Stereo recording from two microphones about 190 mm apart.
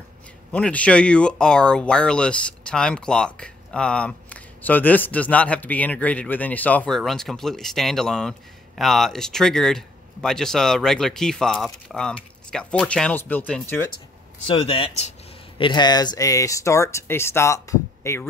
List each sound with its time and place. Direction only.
0.5 s speech: 5° left (ahead or behind)
14.5 s speech: 30° left (ahead or behind); by 18.3 s 15° left (ahead or behind)